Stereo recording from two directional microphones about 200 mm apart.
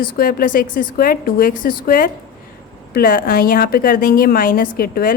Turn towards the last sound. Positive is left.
turn(degrees=45)  # may be behind; listen again after turning